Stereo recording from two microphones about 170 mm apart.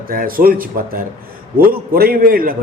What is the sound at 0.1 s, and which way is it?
A man's voice, 55° right (ahead or behind).